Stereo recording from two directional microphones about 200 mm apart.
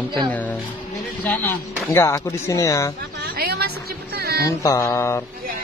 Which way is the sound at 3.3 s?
50° right (ahead or behind).